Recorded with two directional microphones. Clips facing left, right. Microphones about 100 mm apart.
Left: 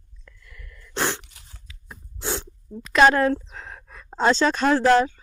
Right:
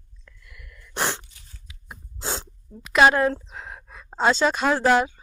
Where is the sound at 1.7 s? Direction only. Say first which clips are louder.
Right 2 dB; 20° right (ahead or behind).